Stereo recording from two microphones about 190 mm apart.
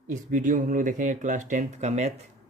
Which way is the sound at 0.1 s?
45° right (ahead or behind).